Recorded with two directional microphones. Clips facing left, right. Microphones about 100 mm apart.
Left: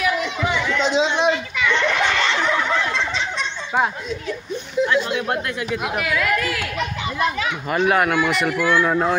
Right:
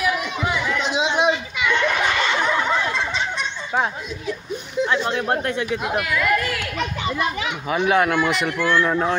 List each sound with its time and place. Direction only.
0.0 s children playing: 5° right (ahead or behind)
4.8 s speech: 35° right (ahead or behind)
5.9 s speech: centre (ahead or behind)
7.8 s speech: centre (ahead or behind)